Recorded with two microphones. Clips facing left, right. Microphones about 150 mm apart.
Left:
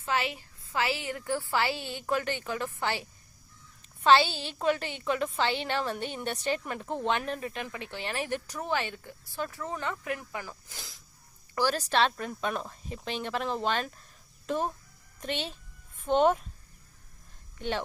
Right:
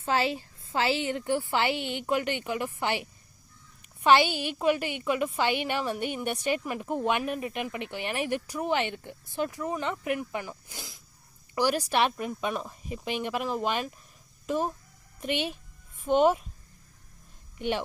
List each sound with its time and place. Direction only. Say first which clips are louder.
0.0 s a woman's voice: right 4 dB; 30° right (ahead or behind); by 16.4 s 10° right (ahead or behind)
17.6 s speech: right 3 dB; 15° right (ahead or behind)